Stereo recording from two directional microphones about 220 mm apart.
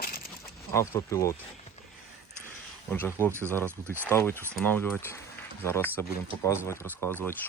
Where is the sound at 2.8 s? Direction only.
10° left (ahead or behind).